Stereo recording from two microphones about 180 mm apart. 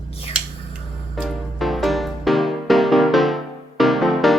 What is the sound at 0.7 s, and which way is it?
Music, centre (ahead or behind).